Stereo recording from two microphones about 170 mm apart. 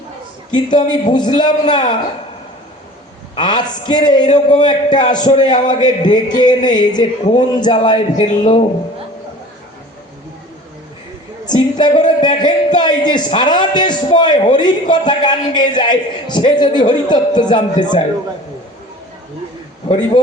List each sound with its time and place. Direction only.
0.5 s a man's voice: 25° left (ahead or behind)
3.3 s a man's voice: 25° left (ahead or behind)
11.4 s a man's voice: 25° left (ahead or behind)
19.9 s a man's voice: 30° left (ahead or behind)